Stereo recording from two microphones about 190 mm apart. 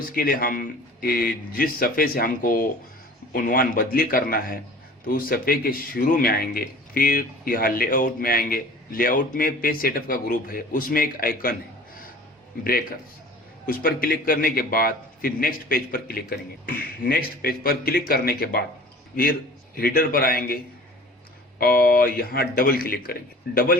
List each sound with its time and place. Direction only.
0.2 s a man's voice: 50° left (ahead or behind)
13.7 s a man's voice: 50° left (ahead or behind)
21.6 s a man's voice: 50° left (ahead or behind)